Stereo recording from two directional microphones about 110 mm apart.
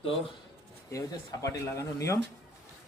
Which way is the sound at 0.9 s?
30° left (ahead or behind).